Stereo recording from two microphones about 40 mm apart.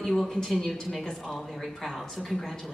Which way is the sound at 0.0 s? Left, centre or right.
Centre.